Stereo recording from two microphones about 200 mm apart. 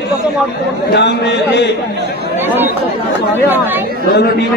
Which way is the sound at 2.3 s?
10° right (ahead or behind).